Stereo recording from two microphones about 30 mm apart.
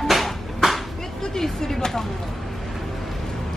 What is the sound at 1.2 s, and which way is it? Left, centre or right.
Speech, centre.